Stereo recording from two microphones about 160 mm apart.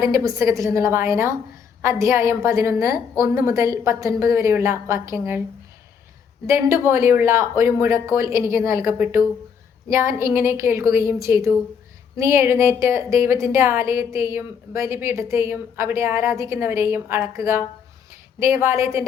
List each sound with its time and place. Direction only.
0.0 s a woman's voice: 20° right (ahead or behind)
6.5 s a woman's voice: 15° right (ahead or behind)